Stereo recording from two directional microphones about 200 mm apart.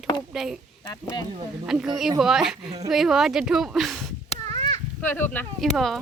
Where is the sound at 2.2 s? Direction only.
Centre (ahead or behind).